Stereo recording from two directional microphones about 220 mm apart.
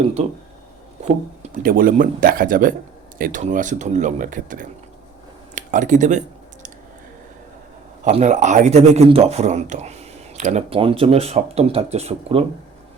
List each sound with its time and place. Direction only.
1.0 s speech: 35° right (ahead or behind)
5.5 s a sound: 35° right (ahead or behind)
8.0 s speech: 30° right (ahead or behind)